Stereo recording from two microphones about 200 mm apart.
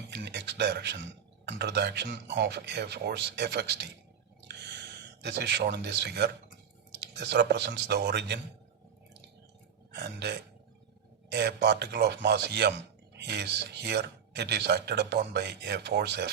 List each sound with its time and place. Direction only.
0.1 s a sound: 60° right (ahead or behind)
1.5 s speech: 55° right (ahead or behind)
4.4 s gasp: 60° right (ahead or behind)
6.9 s speech: 60° right (ahead or behind)
9.9 s speech: 55° right (ahead or behind)